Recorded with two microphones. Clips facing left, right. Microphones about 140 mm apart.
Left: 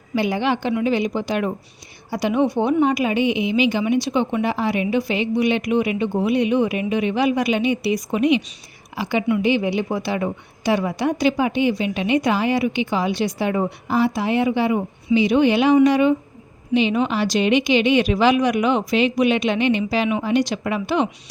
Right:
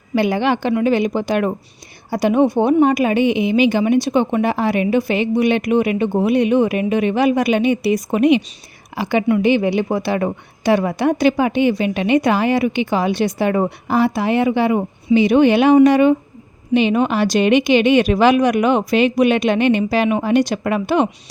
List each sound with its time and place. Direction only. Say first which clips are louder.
0.1 s a woman's voice: right 4 dB; 60° right (ahead or behind)